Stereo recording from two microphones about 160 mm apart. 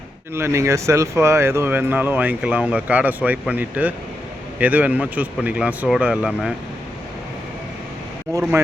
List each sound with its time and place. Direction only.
0.3 s speech: 15° right (ahead or behind)
8.3 s speech: 20° right (ahead or behind)